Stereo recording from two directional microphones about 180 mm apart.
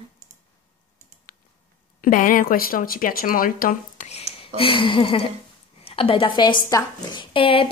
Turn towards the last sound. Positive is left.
turn(degrees=30)  # may be behind; listen again after turning